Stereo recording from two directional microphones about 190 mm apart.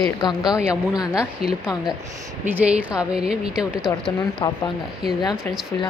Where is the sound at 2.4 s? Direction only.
10° right (ahead or behind).